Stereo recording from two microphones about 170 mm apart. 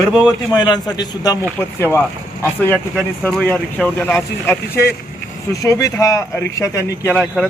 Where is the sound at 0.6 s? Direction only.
25° left (ahead or behind).